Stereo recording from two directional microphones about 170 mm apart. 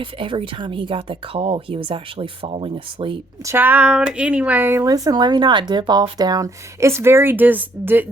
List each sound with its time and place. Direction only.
0.0 s speech: 30° right (ahead or behind)
3.4 s speech: 15° right (ahead or behind)